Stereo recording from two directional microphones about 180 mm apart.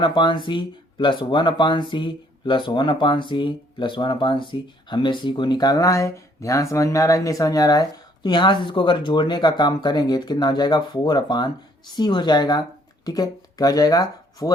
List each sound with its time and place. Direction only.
0.0 s speech: 25° left (ahead or behind)